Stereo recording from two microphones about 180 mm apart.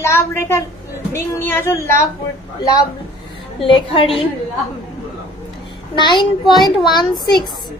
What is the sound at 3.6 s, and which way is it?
Speech, 30° left (ahead or behind).